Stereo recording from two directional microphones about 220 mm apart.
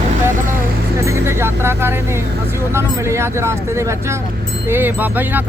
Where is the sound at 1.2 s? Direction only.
10° right (ahead or behind).